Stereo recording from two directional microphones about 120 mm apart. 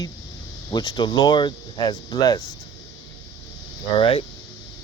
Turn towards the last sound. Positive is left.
turn(degrees=45)  # may be behind; listen again after turning